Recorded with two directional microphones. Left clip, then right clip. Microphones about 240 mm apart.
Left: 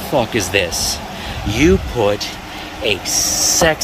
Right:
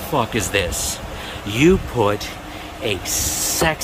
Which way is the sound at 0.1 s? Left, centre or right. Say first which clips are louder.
Left 4 dB; centre.